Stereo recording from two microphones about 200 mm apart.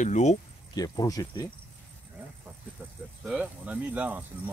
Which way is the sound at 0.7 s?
20° left (ahead or behind).